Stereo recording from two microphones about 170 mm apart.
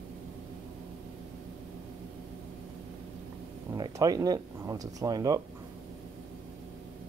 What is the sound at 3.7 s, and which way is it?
Speech, 20° right (ahead or behind).